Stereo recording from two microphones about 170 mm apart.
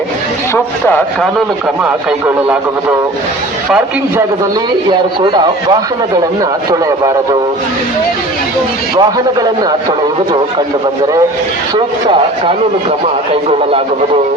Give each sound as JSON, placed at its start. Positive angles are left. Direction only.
{"t": 1.8, "sound": "speech", "side_deg": -5}
{"t": 9.0, "sound": "a man's voice", "side_deg": -20}